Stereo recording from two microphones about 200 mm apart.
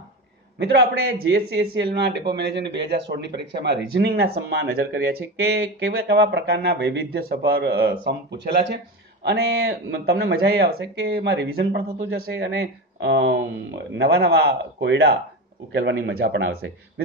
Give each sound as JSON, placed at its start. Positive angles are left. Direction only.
{"t": 0.6, "sound": "speech", "side_deg": -55}
{"t": 12.2, "sound": "speech", "side_deg": -70}